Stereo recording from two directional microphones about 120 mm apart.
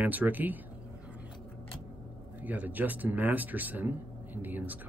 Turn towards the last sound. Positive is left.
turn(degrees=-15)  # may be behind; listen again after turning